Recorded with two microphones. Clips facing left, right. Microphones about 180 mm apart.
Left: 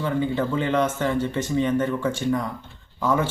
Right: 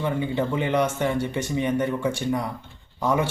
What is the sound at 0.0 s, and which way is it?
A man's voice, 20° right (ahead or behind).